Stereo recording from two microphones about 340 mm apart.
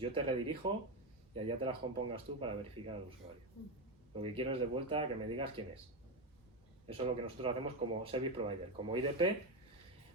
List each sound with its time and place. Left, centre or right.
0.0 s speech: centre
4.1 s speech: centre
6.8 s speech: centre